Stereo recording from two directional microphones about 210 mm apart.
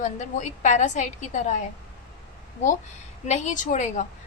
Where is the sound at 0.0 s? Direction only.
35° left (ahead or behind).